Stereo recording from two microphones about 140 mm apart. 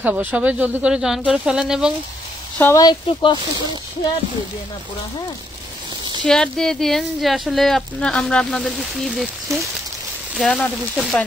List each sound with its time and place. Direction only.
0.0 s speech: 10° right (ahead or behind)
2.6 s speech: 25° left (ahead or behind)
6.2 s speech: 5° left (ahead or behind)